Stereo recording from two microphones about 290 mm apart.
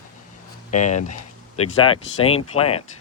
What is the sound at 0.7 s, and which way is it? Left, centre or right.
Speech, left.